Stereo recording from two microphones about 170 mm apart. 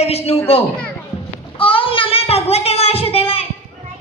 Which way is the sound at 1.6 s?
30° left (ahead or behind).